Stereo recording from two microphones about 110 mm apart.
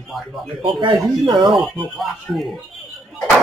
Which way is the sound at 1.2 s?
45° right (ahead or behind).